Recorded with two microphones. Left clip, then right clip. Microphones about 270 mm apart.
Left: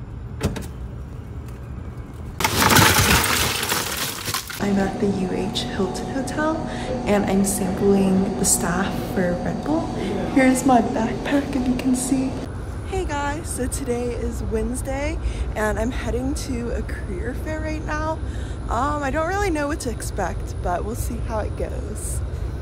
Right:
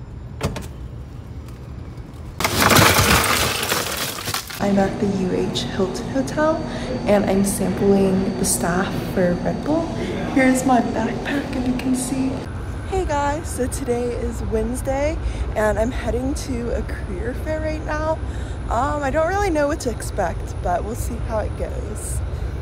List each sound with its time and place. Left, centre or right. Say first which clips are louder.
0.4 s vehicle: right 1 dB; centre
2.3 s coin: right 1 dB; centre
10.0 s a sound: left 1 dB; centre
10.7 s a woman's voice: even; left
12.9 s speech: right 4 dB; centre